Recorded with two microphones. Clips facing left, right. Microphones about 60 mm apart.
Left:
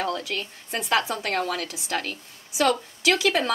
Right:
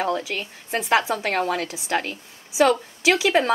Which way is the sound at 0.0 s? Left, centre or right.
Right.